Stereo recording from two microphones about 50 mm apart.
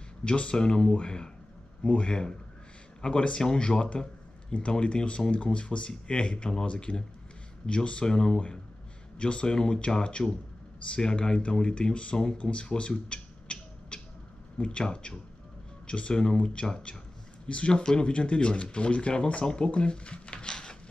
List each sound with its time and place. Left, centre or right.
0.2 s speech: left
12.4 s a sound: left
14.6 s speech: centre